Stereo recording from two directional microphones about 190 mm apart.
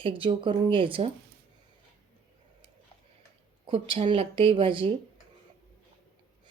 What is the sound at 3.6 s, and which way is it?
A woman's voice, 25° right (ahead or behind).